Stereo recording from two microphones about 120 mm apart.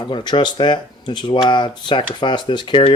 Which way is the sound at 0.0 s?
40° left (ahead or behind).